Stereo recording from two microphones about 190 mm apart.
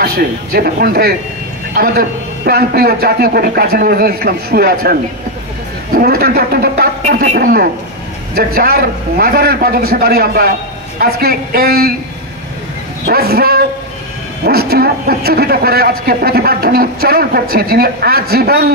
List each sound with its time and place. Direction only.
0.0 s a man's voice: 55° right (ahead or behind)
5.9 s a man's voice: 55° right (ahead or behind)
13.0 s a man's voice: 55° right (ahead or behind)